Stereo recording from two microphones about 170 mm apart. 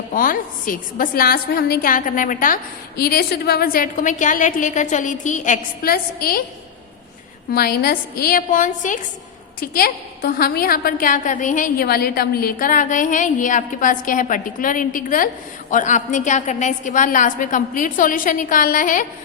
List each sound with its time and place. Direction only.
0.1 s a woman's voice: 55° left (ahead or behind)
3.0 s a woman's voice: 65° left (ahead or behind)
7.5 s a woman's voice: 65° left (ahead or behind); by 9.0 s 50° left (ahead or behind)
9.6 s a woman's voice: 60° left (ahead or behind)